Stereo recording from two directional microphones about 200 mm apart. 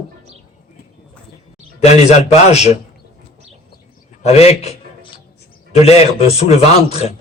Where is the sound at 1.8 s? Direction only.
35° left (ahead or behind).